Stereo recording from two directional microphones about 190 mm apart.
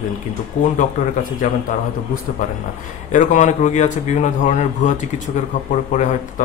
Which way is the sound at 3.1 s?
40° left (ahead or behind).